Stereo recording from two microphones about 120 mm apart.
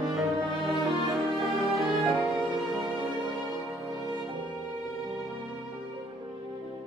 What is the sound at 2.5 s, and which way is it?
Music, centre (ahead or behind).